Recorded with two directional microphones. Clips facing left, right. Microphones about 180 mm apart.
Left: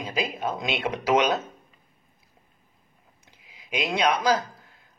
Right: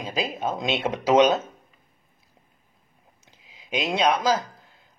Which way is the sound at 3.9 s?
15° right (ahead or behind).